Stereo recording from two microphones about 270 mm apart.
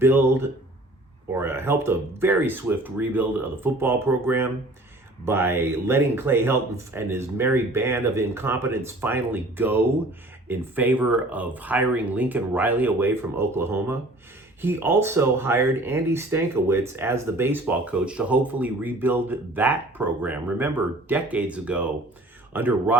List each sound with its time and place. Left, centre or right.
0.0 s speech: centre